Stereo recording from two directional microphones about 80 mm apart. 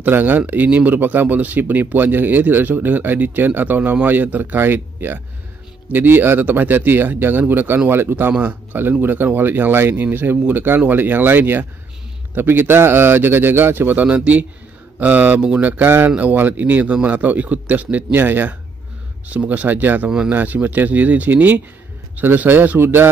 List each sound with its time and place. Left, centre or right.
0.0 s speech: right
20.1 s speech: centre
20.3 s speech: right